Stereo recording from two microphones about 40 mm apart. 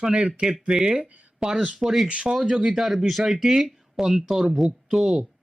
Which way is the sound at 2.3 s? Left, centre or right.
Centre.